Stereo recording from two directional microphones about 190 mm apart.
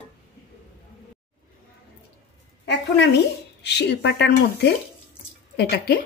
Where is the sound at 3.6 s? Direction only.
60° left (ahead or behind).